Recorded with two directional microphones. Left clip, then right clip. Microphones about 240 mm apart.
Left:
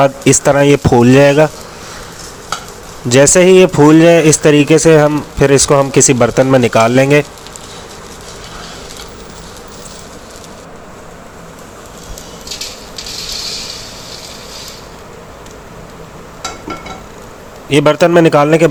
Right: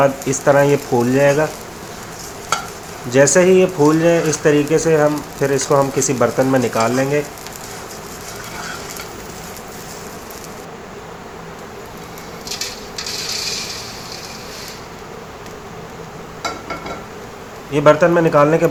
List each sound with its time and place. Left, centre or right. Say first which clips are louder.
0.0 s speech: left 5 dB; left
3.1 s speech: left 5 dB; left
17.7 s speech: left 3 dB; left